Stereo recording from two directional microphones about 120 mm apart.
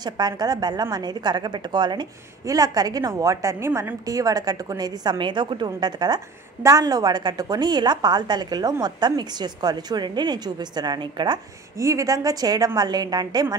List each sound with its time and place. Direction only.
0.0 s a woman's voice: 35° right (ahead or behind)
11.8 s a woman's voice: 25° right (ahead or behind)